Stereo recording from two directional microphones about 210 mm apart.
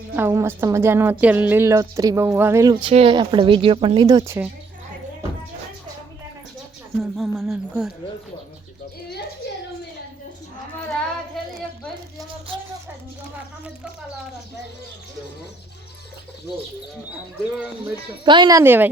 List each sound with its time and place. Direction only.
0.2 s speech: 10° right (ahead or behind)
7.0 s speech: centre (ahead or behind)
11.4 s a sound: centre (ahead or behind)
18.3 s speech: 20° right (ahead or behind)